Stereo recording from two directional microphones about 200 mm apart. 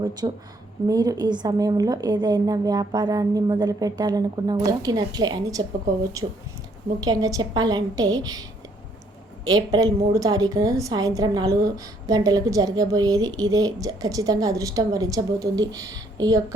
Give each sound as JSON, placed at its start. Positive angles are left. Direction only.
{"t": 0.0, "sound": "a woman's voice", "side_deg": -20}
{"t": 9.7, "sound": "a woman's voice", "side_deg": -15}